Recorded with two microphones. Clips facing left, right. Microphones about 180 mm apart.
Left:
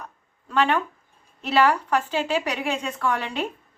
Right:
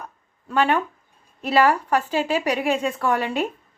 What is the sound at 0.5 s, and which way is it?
Speech, 10° right (ahead or behind).